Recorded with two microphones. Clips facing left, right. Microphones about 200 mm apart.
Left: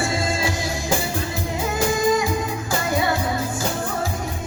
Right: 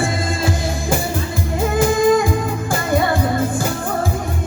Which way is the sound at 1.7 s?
55° right (ahead or behind).